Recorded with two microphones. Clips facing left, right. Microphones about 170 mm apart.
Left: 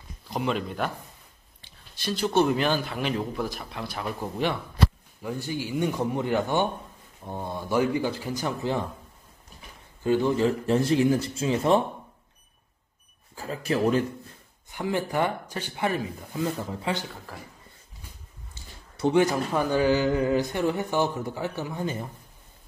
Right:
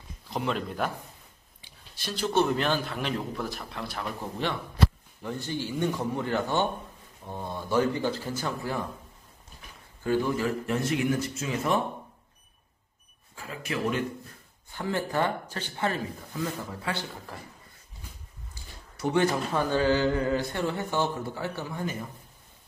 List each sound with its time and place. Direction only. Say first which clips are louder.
0.3 s a man's voice: left 2 dB; centre (ahead or behind); by 8.8 s 20° left (ahead or behind)
10.0 s speech: left 4 dB; 20° left (ahead or behind)
13.4 s speech: left 6 dB; 35° left (ahead or behind)
14.7 s speech: left 2 dB; 15° left (ahead or behind)
17.3 s a man's voice: left 1 dB; centre (ahead or behind)
18.5 s a sound: even; 25° left (ahead or behind)
19.5 s speech: left 3 dB; 15° left (ahead or behind)